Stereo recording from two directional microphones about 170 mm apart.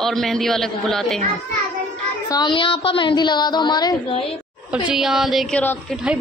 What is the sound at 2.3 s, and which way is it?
Speech, 25° left (ahead or behind).